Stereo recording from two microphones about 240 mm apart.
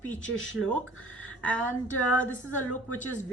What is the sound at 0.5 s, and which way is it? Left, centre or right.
Speech, centre.